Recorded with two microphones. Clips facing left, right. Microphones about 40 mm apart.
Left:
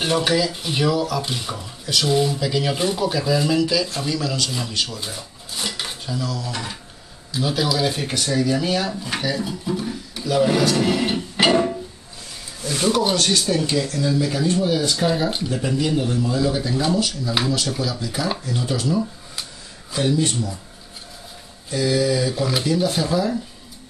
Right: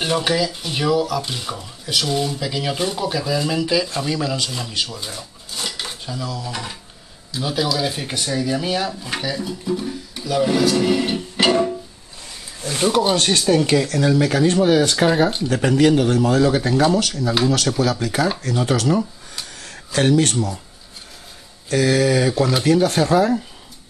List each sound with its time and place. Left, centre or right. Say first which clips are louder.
0.0 s speech: even; centre
4.5 s speech: even; centre
4.9 s dishes: even; centre
6.0 s speech: left 2 dB; centre
12.6 s speech: right 2 dB; right
13.1 s speech: right 3 dB; right
13.8 s speech: right 4 dB; right
15.5 s speech: right 9 dB; right
21.6 s speech: right 3 dB; right